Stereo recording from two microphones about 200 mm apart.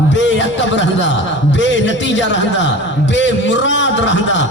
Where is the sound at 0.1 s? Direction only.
65° left (ahead or behind).